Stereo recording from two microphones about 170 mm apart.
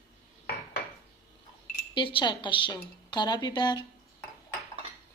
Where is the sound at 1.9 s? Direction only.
30° left (ahead or behind).